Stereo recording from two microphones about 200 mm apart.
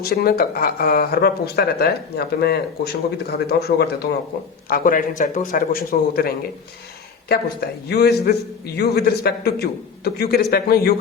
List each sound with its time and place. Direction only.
0.0 s speech: 50° left (ahead or behind)
7.9 s speech: 55° left (ahead or behind)